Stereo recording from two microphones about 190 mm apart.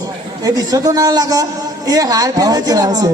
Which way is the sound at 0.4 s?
20° right (ahead or behind).